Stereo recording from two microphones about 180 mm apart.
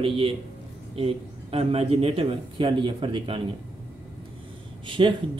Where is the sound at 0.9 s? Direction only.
30° right (ahead or behind).